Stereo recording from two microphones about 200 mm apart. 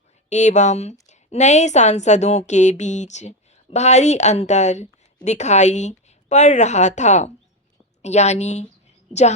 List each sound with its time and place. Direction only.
0.3 s a woman's voice: 35° left (ahead or behind)